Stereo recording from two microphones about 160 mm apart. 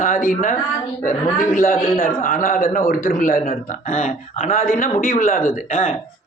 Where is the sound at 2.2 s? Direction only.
55° left (ahead or behind).